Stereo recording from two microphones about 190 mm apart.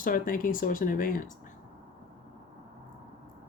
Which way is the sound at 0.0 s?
45° left (ahead or behind).